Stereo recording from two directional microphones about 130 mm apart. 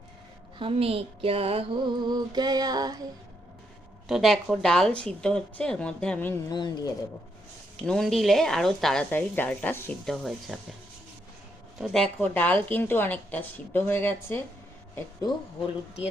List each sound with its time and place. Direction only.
0.6 s a sound: 50° right (ahead or behind); by 3.0 s 30° right (ahead or behind)
4.1 s a woman's voice: centre (ahead or behind)
6.5 s speech: 30° left (ahead or behind)
7.9 s speech: centre (ahead or behind)
10.1 s speech: centre (ahead or behind)
11.8 s a woman's voice: 5° left (ahead or behind)